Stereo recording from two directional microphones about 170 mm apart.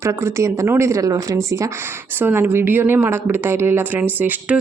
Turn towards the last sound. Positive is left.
turn(degrees=-10)  # may be behind; listen again after turning